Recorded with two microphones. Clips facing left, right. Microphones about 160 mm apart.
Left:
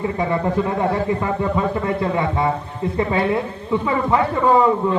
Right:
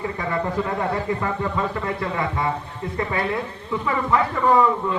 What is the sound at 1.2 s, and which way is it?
Speech, 25° left (ahead or behind).